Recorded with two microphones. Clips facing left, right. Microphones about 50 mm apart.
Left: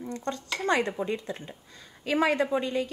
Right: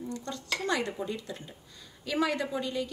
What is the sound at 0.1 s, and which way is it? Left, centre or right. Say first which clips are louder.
A woman's voice: left 3 dB; left.